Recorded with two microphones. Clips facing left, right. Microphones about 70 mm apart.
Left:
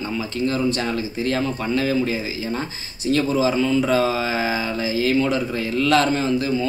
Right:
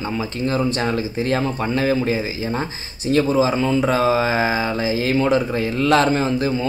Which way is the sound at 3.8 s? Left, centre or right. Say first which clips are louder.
Right 2 dB; right.